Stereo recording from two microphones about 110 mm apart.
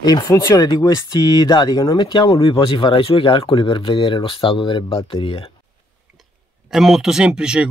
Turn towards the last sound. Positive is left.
turn(degrees=-10)  # may be behind; listen again after turning